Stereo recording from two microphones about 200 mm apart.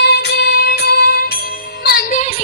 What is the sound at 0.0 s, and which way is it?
Music, 60° left (ahead or behind).